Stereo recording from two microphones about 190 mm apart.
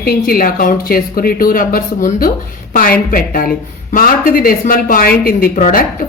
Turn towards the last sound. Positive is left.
turn(degrees=45)  # may be behind; listen again after turning